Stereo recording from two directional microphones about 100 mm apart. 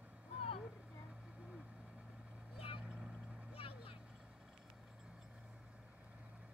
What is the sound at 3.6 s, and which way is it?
Vehicle, 70° left (ahead or behind).